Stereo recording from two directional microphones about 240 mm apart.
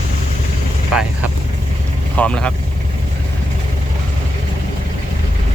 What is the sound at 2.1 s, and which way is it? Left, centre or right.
Speech, centre.